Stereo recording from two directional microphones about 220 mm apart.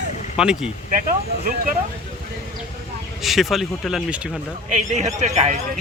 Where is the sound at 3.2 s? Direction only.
Centre (ahead or behind).